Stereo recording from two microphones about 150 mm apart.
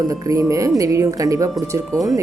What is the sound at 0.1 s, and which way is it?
A woman's voice, 20° right (ahead or behind).